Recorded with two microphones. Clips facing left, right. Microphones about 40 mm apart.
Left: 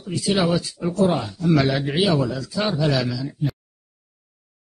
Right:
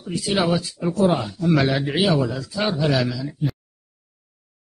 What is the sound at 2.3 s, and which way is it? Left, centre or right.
Speech, centre.